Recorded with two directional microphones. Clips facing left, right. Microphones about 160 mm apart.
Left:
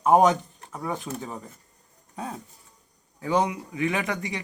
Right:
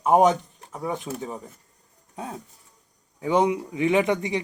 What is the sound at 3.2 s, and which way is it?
Speech, 20° right (ahead or behind).